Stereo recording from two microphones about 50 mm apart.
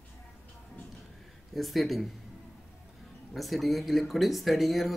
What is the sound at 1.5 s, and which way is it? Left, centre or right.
Speech, centre.